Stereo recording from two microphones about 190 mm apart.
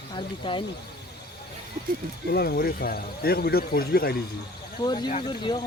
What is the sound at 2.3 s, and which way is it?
Speech, 55° left (ahead or behind).